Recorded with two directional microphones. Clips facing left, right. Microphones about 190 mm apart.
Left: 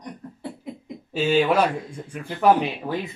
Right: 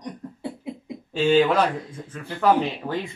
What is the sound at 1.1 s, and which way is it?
Speech, 10° left (ahead or behind).